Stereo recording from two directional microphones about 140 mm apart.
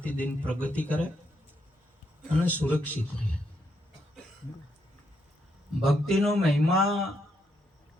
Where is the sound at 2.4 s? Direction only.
10° left (ahead or behind).